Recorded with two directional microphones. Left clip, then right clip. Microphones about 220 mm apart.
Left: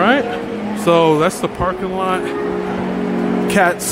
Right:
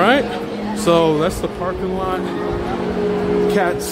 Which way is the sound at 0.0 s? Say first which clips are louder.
Even; centre (ahead or behind).